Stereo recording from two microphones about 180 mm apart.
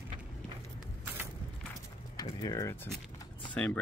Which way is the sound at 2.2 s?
20° left (ahead or behind).